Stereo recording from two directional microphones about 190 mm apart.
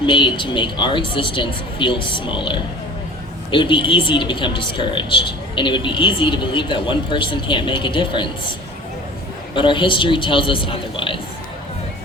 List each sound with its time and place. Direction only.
0.0 s a woman's voice: 25° left (ahead or behind)
9.6 s a woman's voice: 25° left (ahead or behind)